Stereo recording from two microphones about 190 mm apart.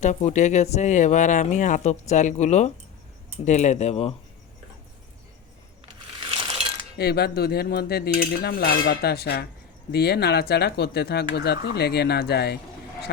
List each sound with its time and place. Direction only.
0.0 s speech: 40° left (ahead or behind)
7.0 s speech: 55° left (ahead or behind)